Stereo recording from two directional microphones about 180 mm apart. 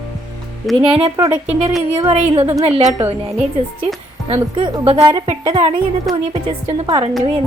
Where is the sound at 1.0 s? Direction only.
25° right (ahead or behind).